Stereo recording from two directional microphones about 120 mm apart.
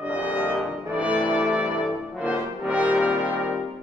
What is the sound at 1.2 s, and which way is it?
Brass instrument, 10° left (ahead or behind).